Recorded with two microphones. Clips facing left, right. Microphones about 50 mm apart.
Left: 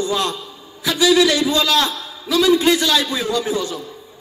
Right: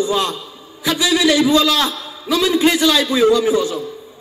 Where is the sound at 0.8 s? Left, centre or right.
Centre.